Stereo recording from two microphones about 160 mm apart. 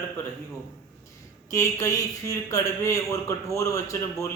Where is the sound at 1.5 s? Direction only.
20° left (ahead or behind).